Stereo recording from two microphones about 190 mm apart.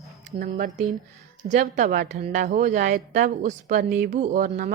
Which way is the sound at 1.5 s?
40° right (ahead or behind).